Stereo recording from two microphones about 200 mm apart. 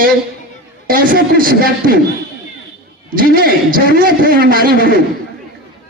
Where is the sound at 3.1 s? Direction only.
45° right (ahead or behind).